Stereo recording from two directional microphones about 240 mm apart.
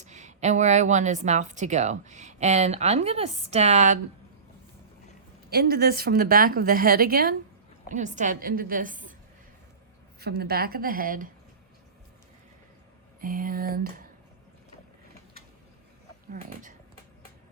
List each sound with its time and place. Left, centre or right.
0.0 s speech: right
5.5 s a woman's voice: right
10.2 s a woman's voice: right
13.2 s a woman's voice: right
16.3 s a woman's voice: right